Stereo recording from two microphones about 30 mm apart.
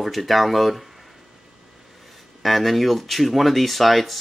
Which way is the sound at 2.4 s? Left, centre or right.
Centre.